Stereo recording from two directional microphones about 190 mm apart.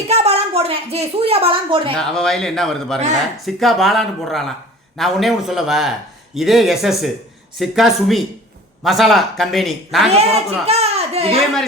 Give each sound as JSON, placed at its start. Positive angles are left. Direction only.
{"t": 0.1, "sound": "a woman's voice", "side_deg": -30}
{"t": 2.0, "sound": "speech", "side_deg": 5}
{"t": 10.1, "sound": "a child's voice", "side_deg": -35}